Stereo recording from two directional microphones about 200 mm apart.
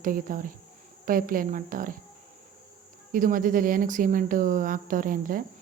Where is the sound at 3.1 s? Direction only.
40° right (ahead or behind).